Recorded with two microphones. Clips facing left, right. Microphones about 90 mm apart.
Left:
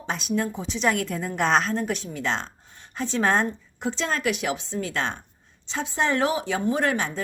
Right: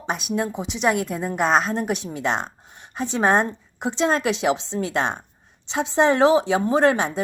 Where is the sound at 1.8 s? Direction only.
20° right (ahead or behind).